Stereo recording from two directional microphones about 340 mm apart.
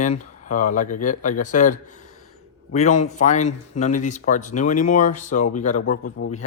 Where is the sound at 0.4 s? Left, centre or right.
Left.